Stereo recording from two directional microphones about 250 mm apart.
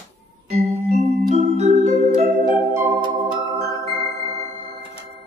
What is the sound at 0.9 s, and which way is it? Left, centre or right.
Music, right.